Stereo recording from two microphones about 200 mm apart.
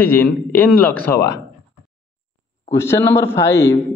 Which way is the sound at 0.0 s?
10° left (ahead or behind).